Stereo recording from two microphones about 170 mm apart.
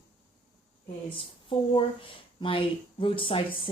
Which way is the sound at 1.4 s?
30° left (ahead or behind).